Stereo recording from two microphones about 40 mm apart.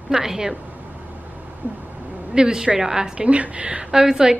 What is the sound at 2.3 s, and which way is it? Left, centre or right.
Speech, centre.